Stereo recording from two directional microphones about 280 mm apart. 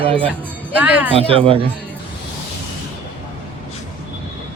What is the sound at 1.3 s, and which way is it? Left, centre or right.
Speech, centre.